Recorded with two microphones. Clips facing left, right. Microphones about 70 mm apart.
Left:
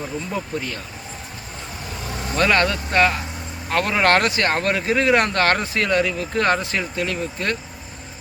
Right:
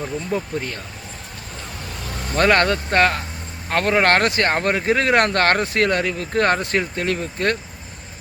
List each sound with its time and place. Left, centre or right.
0.0 s speech: centre
2.3 s speech: right
4.9 s speech: right